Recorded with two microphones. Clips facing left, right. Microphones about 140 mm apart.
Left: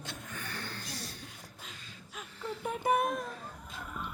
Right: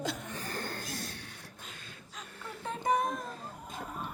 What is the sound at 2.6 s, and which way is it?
Speech, 10° left (ahead or behind).